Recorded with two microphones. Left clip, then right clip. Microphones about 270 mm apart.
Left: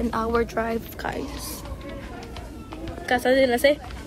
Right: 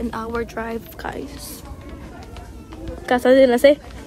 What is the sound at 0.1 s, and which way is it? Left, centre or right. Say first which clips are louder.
Speech: left 2 dB; centre.